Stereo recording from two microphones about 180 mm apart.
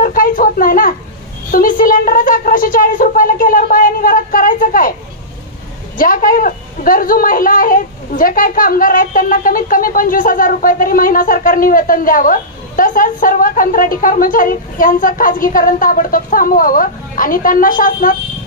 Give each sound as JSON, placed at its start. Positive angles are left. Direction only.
{"t": 0.0, "sound": "a sound", "side_deg": 50}
{"t": 1.5, "sound": "a woman's voice", "side_deg": 50}
{"t": 5.9, "sound": "a woman's voice", "side_deg": 50}